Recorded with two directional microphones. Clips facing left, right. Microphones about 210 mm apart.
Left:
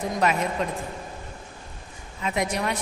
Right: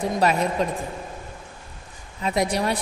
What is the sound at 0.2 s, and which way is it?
Speech, 35° right (ahead or behind).